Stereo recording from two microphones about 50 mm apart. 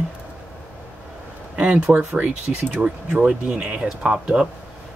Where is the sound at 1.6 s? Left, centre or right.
Right.